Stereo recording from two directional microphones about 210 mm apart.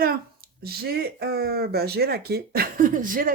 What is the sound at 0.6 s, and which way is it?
Speech, 45° right (ahead or behind).